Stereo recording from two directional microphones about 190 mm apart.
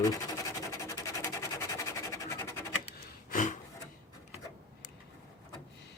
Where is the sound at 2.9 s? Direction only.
40° left (ahead or behind).